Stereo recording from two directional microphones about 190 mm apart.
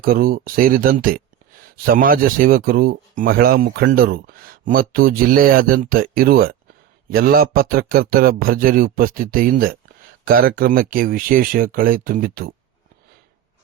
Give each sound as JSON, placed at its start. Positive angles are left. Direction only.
{"t": 0.0, "sound": "speech", "side_deg": -50}